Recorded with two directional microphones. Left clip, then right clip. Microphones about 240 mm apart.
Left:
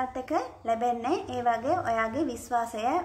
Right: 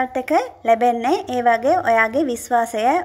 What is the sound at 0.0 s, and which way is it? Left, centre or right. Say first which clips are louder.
A woman's voice: right 11 dB; right.